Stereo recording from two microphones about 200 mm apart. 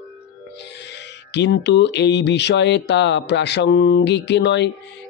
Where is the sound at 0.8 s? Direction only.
60° left (ahead or behind).